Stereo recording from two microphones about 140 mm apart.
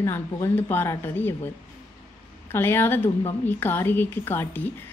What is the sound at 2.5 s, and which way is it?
Speech, 15° left (ahead or behind).